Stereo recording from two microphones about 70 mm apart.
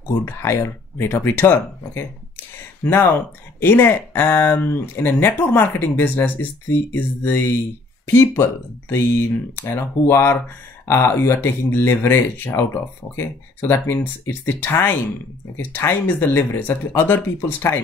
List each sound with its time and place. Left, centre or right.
0.1 s speech: left
0.9 s speech: left